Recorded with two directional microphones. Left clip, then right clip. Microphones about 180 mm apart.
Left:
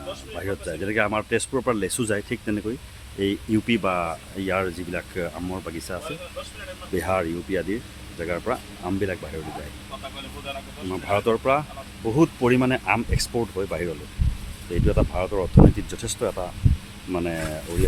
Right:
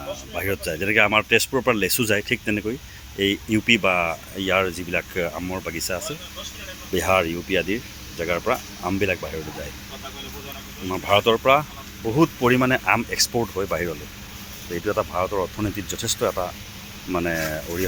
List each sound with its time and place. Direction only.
0.3 s speech: 15° right (ahead or behind)
10.8 s speech: 5° right (ahead or behind)
14.8 s speech: 20° left (ahead or behind); by 17.6 s 5° left (ahead or behind)